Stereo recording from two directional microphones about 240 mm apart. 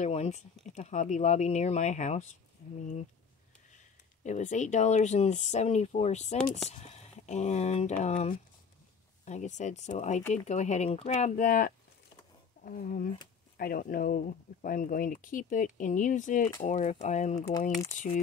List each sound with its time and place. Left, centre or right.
0.0 s speech: left
2.6 s a sound: left
4.2 s speech: left
17.4 s speech: centre
17.9 s speech: left